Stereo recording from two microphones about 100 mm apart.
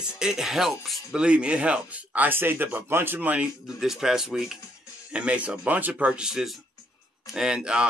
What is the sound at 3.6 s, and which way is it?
Speech, 5° right (ahead or behind).